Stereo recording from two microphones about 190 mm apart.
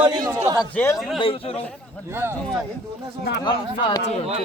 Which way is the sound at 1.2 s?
30° left (ahead or behind).